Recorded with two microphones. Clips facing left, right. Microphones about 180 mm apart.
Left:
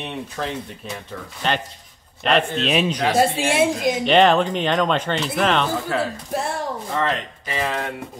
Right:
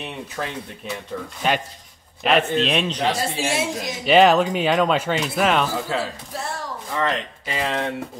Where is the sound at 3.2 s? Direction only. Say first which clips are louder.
Left 6 dB; 55° left (ahead or behind).